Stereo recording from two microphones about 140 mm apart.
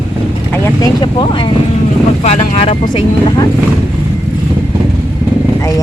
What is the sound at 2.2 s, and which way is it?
Speech, 50° left (ahead or behind).